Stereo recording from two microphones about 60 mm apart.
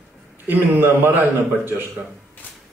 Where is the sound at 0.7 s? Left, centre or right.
Right.